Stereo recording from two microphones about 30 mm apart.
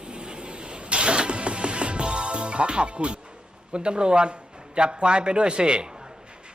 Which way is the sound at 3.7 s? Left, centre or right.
Right.